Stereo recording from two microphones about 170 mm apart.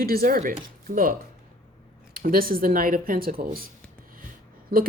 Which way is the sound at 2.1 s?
55° right (ahead or behind).